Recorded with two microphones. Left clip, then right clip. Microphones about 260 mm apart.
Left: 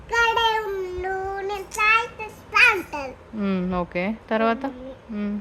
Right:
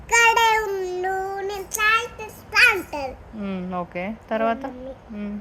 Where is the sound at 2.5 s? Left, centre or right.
Centre.